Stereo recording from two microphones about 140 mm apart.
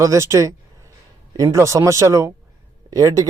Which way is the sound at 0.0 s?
20° right (ahead or behind).